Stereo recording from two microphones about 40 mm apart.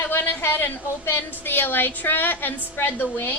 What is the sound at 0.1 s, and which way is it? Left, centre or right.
A woman's voice, left.